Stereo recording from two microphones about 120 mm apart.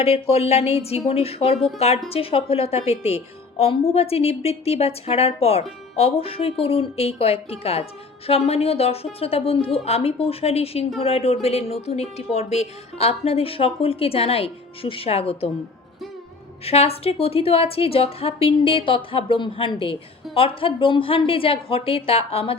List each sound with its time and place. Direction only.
0.0 s a woman's voice: 55° left (ahead or behind)
16.6 s a woman's voice: 55° left (ahead or behind)